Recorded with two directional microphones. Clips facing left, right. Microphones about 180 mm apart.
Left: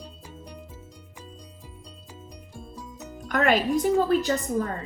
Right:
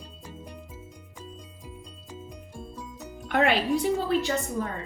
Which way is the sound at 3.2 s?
45° left (ahead or behind).